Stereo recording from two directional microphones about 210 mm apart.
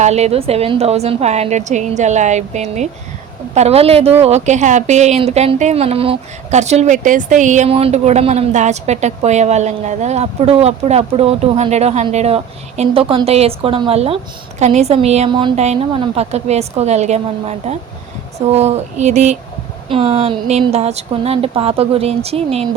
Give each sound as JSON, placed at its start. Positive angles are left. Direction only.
{"t": 0.0, "sound": "speech", "side_deg": -30}